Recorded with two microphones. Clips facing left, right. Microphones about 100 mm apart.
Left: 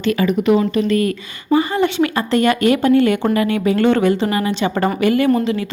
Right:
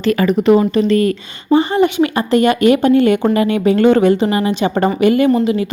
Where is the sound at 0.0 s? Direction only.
40° right (ahead or behind).